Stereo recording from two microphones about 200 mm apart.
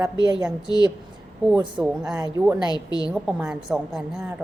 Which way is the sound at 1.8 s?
5° right (ahead or behind).